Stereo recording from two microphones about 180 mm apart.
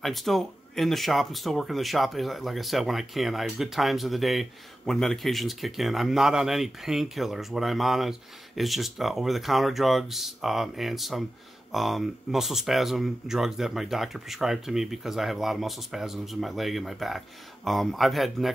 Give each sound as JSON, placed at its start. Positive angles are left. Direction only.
{"t": 0.0, "sound": "speech", "side_deg": 0}